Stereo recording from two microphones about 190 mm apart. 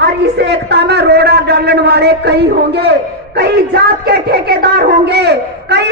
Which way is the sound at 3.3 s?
60° right (ahead or behind).